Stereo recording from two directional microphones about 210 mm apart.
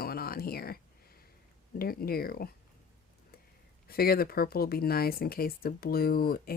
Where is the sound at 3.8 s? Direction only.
45° left (ahead or behind).